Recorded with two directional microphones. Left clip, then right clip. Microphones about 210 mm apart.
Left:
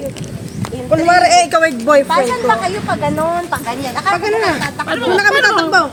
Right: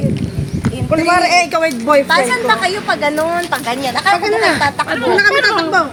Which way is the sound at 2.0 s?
50° right (ahead or behind).